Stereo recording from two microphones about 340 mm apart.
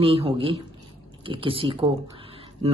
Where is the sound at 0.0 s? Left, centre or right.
Centre.